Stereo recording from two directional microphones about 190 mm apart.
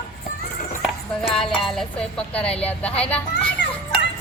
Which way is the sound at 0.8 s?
Centre (ahead or behind).